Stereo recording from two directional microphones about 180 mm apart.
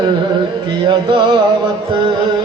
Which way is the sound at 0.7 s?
25° right (ahead or behind).